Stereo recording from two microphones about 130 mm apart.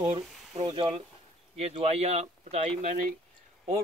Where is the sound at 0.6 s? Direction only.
35° right (ahead or behind).